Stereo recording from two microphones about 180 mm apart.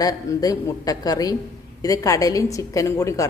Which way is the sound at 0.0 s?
20° left (ahead or behind).